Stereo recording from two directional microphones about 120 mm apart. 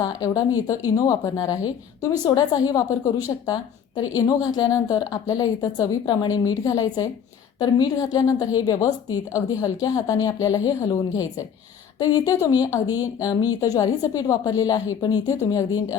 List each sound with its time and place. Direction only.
0.0 s a woman's voice: 30° left (ahead or behind)